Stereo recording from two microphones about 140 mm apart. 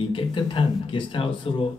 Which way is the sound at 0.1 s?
35° left (ahead or behind).